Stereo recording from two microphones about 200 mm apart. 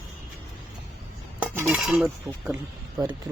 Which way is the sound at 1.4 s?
5° right (ahead or behind).